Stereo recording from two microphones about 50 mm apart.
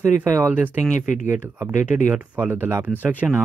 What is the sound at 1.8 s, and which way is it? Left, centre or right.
Speech, right.